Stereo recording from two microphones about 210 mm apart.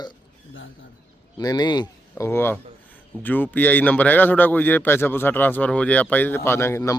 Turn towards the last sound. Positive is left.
turn(degrees=15)  # may be behind; listen again after turning